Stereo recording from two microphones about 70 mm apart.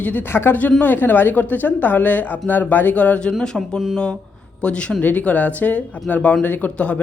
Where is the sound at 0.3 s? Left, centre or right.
Left; by 3.3 s centre.